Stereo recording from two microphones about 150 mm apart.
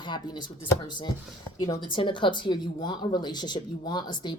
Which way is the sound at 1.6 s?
35° left (ahead or behind).